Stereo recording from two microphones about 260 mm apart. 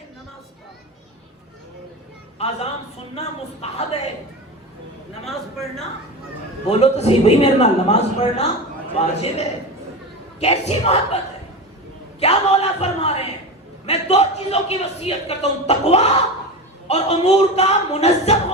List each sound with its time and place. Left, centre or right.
3.2 s a man's voice: left
5.2 s a man's voice: centre
6.7 s a man's voice: left
12.2 s a man's voice: left